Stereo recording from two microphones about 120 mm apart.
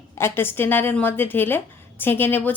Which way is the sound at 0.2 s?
20° left (ahead or behind).